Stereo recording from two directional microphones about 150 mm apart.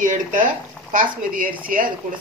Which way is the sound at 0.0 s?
60° right (ahead or behind).